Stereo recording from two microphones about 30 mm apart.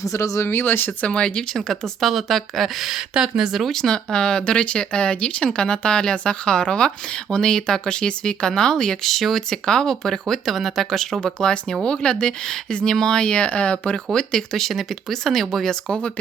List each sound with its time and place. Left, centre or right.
1.0 s speech: left
1.5 s speech: centre
3.2 s speech: right
3.7 s speech: centre
9.0 s speech: centre
9.5 s speech: centre
10.5 s speech: centre
11.2 s speech: left
13.9 s speech: left
14.6 s speech: centre
15.9 s speech: left